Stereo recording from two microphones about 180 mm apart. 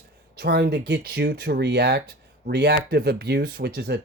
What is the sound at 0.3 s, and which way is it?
Speech, 60° right (ahead or behind).